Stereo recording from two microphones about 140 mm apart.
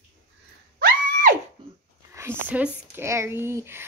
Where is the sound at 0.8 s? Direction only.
80° right.